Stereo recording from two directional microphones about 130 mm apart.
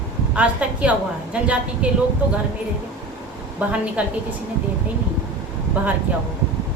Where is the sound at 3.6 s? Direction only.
10° right (ahead or behind).